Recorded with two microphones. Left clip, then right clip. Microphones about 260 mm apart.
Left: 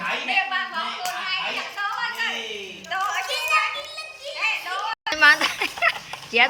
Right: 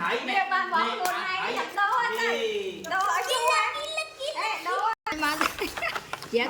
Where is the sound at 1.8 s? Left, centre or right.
Right.